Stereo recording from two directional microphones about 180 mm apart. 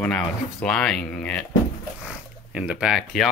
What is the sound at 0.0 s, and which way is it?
Speech, 5° left (ahead or behind).